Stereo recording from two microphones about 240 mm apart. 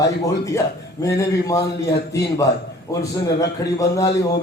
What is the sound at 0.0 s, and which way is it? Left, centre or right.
A man's voice, centre.